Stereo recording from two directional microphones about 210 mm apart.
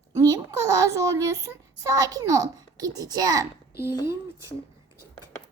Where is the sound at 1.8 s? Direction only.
15° right (ahead or behind).